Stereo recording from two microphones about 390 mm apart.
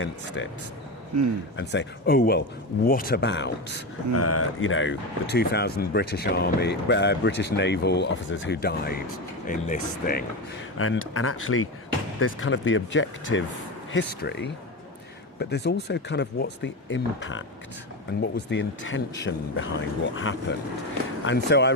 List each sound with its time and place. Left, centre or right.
1.5 s speech: left
10.8 s speech: left